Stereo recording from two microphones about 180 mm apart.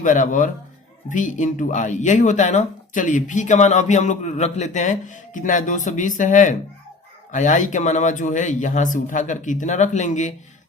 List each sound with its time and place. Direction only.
0.0 s speech: 45° left (ahead or behind)